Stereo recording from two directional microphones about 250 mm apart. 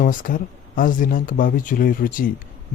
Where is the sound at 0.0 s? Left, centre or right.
Left.